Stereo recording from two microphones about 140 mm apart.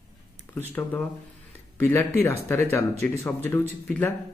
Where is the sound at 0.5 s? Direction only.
15° left (ahead or behind).